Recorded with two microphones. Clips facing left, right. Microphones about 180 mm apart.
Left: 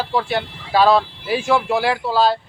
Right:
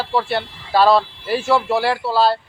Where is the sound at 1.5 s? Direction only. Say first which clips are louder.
Right 1 dB; 5° right (ahead or behind).